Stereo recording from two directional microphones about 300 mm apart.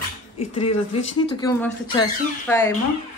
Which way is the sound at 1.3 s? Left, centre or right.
Centre.